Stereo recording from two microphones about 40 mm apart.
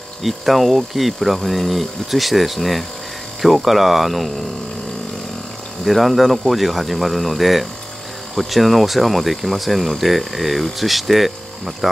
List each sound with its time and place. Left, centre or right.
0.2 s speech: centre
5.9 s speech: centre